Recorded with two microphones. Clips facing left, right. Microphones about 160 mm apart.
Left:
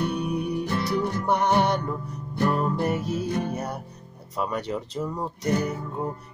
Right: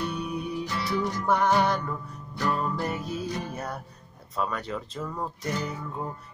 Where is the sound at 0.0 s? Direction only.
65° left (ahead or behind).